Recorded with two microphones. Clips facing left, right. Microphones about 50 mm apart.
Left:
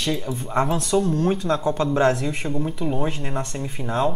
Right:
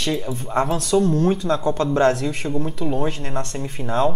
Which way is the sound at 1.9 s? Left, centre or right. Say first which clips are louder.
Right 3 dB; centre.